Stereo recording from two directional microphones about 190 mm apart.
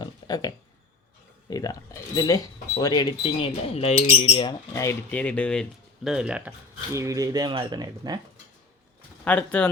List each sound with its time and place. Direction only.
0.0 s a sound: 20° left (ahead or behind)
1.5 s speech: 20° left (ahead or behind); by 6.5 s 5° right (ahead or behind)
6.9 s speech: 15° right (ahead or behind)
9.2 s speech: 5° left (ahead or behind)